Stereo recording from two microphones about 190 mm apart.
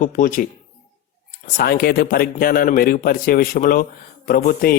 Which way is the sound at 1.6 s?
55° left (ahead or behind).